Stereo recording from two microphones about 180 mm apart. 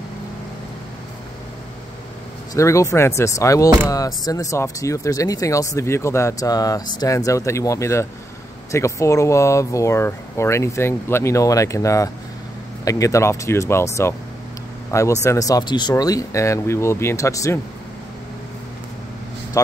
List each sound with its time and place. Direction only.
2.5 s speech: 15° left (ahead or behind)
19.6 s speech: 15° left (ahead or behind)